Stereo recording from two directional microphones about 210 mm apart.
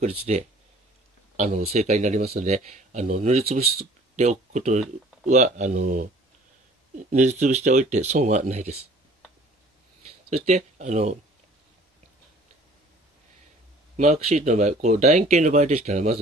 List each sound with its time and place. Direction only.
0.3 s speech: 35° right (ahead or behind)
1.7 s speech: 35° right (ahead or behind)
7.1 s speech: 35° right (ahead or behind)
10.0 s speech: 30° right (ahead or behind)
13.9 s speech: 35° right (ahead or behind)